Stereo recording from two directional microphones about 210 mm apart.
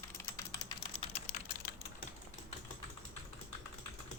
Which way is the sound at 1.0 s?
30° left (ahead or behind).